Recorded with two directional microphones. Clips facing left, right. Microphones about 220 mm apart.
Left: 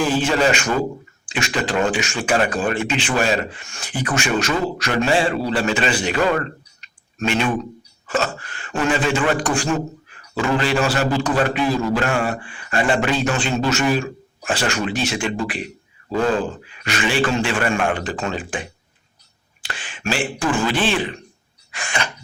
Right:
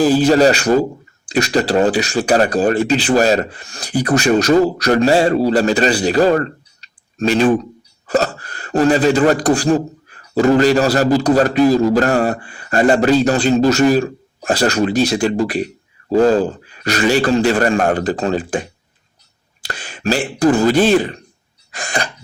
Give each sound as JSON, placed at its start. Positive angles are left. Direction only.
{"t": 0.0, "sound": "speech", "side_deg": -40}
{"t": 21.7, "sound": "cough", "side_deg": -35}